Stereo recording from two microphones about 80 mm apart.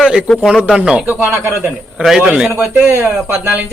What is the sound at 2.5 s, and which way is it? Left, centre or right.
Speech, right.